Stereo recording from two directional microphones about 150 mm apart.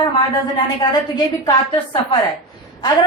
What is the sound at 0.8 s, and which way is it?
Speech, 25° left (ahead or behind).